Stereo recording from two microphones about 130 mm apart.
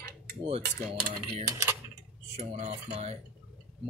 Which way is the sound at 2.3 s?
60° right (ahead or behind).